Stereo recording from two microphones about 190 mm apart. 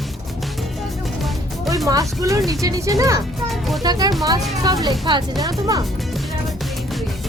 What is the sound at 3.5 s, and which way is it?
Music, centre (ahead or behind).